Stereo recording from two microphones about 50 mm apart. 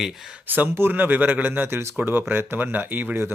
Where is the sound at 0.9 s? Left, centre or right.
Right.